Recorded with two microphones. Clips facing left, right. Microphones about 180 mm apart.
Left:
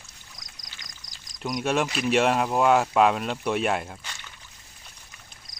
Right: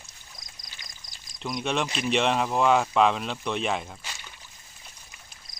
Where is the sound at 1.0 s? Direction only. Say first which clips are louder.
Even; 40° left (ahead or behind).